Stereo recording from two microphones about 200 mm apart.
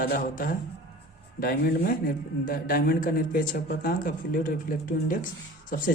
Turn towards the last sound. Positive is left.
turn(degrees=45)  # may be behind; listen again after turning